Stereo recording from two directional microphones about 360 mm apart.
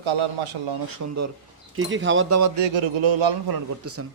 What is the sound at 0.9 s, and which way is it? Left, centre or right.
Speech, right.